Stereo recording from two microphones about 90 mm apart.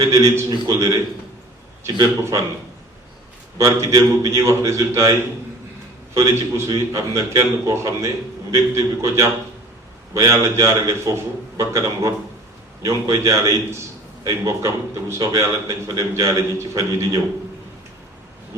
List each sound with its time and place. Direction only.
0.0 s a man's voice: 35° right (ahead or behind)
3.6 s a man's voice: 35° right (ahead or behind)